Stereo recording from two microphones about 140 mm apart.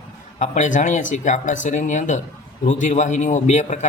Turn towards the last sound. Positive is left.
turn(degrees=55)  # may be behind; listen again after turning